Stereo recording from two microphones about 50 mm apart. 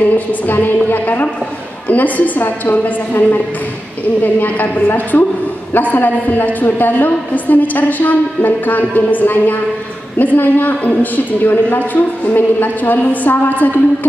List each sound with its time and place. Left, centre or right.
0.3 s a woman's voice: left